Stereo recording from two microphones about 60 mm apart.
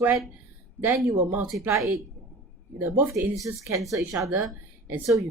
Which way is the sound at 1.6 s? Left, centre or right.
Right.